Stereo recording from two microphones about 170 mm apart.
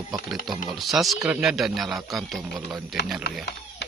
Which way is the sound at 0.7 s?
Centre (ahead or behind).